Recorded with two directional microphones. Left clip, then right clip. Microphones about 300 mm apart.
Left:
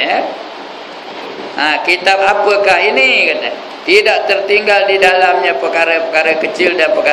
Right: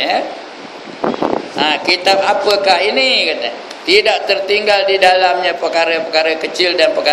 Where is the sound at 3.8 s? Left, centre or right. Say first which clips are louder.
Left 2 dB; right.